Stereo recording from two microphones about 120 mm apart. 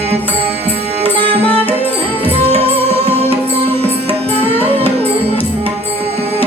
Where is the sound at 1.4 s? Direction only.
15° left (ahead or behind).